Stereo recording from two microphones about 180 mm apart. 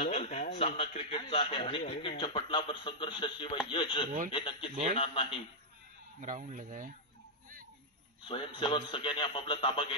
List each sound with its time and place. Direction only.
0.0 s a man's voice: 35° left (ahead or behind)
6.2 s speech: 45° right (ahead or behind)
8.2 s a man's voice: 30° left (ahead or behind)